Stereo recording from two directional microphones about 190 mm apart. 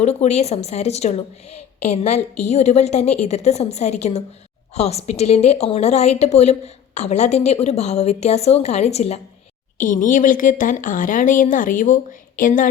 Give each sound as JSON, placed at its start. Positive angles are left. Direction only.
{"t": 0.0, "sound": "a woman's voice", "side_deg": 35}
{"t": 9.7, "sound": "speech", "side_deg": 45}